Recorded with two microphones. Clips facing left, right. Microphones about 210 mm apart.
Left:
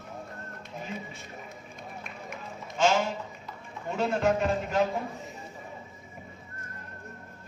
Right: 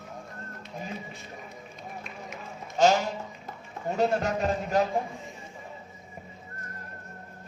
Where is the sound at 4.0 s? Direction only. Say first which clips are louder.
Even; 40° right (ahead or behind).